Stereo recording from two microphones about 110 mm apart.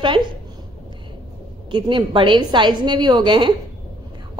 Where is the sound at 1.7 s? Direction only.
45° right (ahead or behind).